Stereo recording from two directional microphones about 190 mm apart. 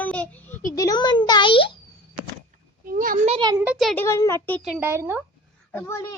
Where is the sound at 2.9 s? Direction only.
45° right (ahead or behind).